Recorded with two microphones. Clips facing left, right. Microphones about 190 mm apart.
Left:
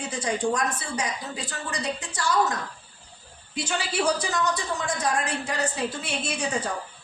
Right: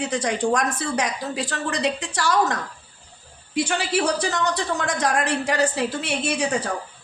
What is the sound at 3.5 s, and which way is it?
A woman's voice, 65° right (ahead or behind).